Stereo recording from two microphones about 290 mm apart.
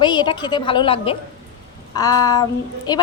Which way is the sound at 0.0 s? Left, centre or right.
Centre.